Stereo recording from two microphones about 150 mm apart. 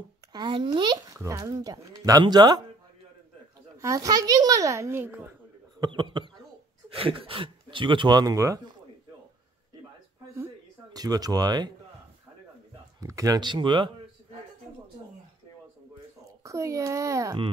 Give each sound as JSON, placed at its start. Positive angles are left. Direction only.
{"t": 0.3, "sound": "a child's voice", "side_deg": -30}
{"t": 3.7, "sound": "a child's voice", "side_deg": -20}
{"t": 5.8, "sound": "speech", "side_deg": -35}
{"t": 10.3, "sound": "a sound", "side_deg": -20}
{"t": 13.0, "sound": "speech", "side_deg": -20}
{"t": 16.4, "sound": "a child's voice", "side_deg": -20}